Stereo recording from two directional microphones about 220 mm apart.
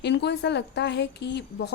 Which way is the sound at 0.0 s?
50° left (ahead or behind).